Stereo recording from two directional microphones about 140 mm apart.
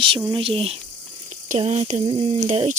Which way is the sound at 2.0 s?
35° right (ahead or behind).